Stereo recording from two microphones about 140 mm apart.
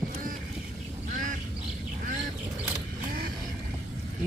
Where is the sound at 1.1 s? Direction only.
70° right (ahead or behind).